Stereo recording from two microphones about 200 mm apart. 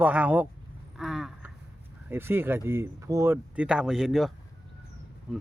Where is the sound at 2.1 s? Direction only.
10° right (ahead or behind).